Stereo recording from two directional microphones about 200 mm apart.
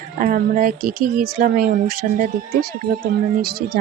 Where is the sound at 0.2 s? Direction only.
40° right (ahead or behind).